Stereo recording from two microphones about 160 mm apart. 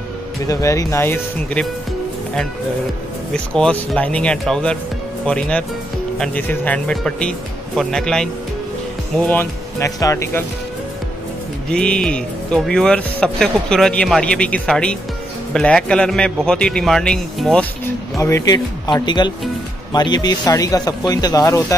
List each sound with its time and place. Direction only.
0.5 s speech: 20° left (ahead or behind)
3.5 s speech: 5° left (ahead or behind)
11.7 s speech: 5° left (ahead or behind)
18.1 s speech: 20° left (ahead or behind)